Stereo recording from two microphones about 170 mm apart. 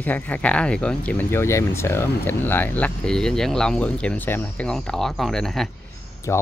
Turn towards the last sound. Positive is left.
turn(degrees=0)  # may be behind; listen again after turning